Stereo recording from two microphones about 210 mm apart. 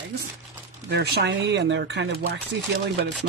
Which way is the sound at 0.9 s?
50° right (ahead or behind).